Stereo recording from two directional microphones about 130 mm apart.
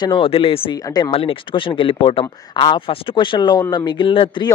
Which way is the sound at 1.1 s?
45° left (ahead or behind).